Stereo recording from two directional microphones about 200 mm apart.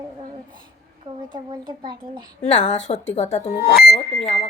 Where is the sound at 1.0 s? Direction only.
25° right (ahead or behind).